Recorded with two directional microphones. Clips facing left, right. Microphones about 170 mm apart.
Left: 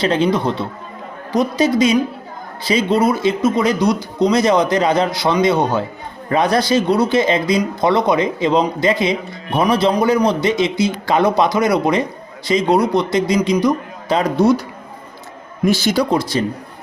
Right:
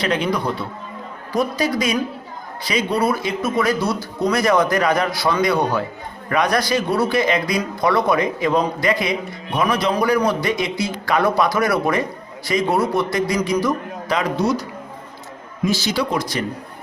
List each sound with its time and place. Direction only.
0.0 s speech: 30° left (ahead or behind)
14.3 s a man's voice: 55° left (ahead or behind)
15.6 s a man's voice: 55° left (ahead or behind)
16.0 s speech: 30° left (ahead or behind)